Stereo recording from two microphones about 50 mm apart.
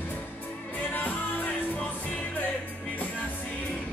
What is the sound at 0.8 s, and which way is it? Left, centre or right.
Music, left.